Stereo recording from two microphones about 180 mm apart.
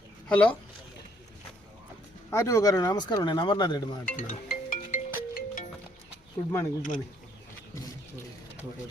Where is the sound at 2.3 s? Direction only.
15° left (ahead or behind).